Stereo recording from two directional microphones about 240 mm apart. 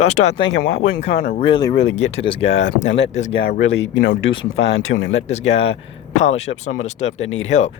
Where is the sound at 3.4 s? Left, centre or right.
Left.